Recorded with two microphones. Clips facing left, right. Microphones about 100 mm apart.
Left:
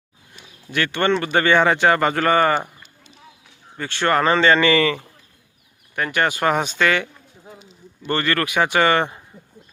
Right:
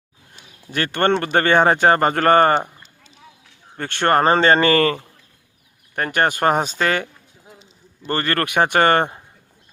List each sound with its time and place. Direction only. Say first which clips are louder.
0.7 s speech: right 1 dB; 45° right (ahead or behind)
3.8 s speech: right 2 dB; 50° right (ahead or behind)